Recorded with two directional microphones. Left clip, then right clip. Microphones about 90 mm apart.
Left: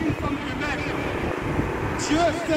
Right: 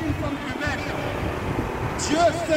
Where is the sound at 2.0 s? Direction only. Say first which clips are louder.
Right 2 dB; 40° right (ahead or behind).